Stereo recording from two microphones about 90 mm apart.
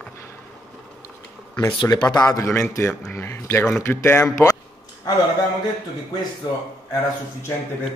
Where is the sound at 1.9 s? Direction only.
40° left (ahead or behind).